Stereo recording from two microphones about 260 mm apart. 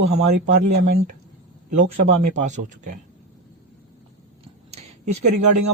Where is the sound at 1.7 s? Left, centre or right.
Right.